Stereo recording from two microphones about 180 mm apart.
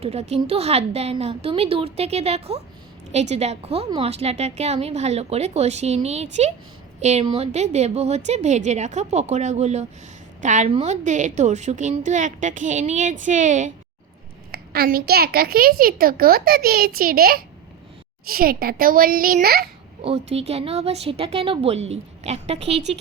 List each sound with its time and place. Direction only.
0.0 s a woman's voice: 35° right (ahead or behind)
14.5 s a woman's voice: 60° right (ahead or behind)
20.0 s a woman's voice: 35° right (ahead or behind)